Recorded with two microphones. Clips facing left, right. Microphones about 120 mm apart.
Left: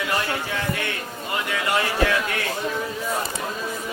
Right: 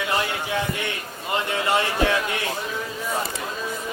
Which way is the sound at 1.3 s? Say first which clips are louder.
Right 2 dB; 25° right (ahead or behind).